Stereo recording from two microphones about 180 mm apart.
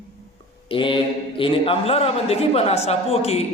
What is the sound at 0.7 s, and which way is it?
A man's voice, 30° left (ahead or behind).